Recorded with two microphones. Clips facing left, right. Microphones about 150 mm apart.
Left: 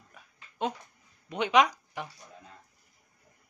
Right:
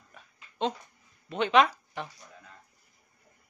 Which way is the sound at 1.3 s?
15° left (ahead or behind).